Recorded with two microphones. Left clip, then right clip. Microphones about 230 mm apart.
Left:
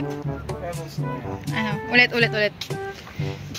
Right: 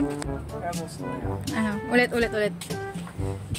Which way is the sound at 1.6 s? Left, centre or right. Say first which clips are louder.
Left 5 dB; right.